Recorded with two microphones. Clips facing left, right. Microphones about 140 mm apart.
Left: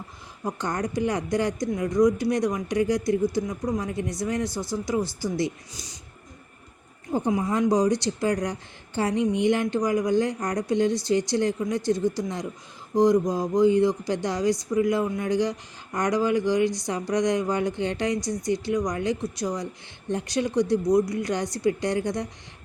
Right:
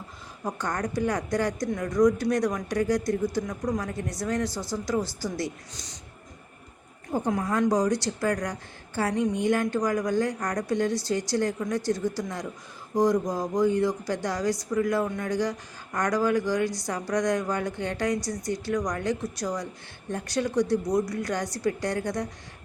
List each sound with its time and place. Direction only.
0.4 s speech: 15° left (ahead or behind)
7.1 s a woman's voice: 10° left (ahead or behind)